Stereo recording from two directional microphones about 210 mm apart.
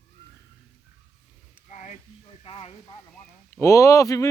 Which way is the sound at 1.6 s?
35° left (ahead or behind).